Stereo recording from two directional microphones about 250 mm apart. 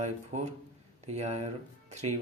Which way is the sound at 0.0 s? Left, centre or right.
Right.